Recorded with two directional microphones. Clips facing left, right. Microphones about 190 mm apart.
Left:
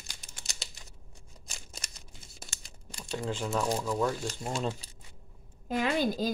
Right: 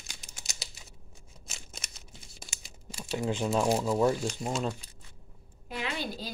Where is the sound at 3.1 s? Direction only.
20° right (ahead or behind).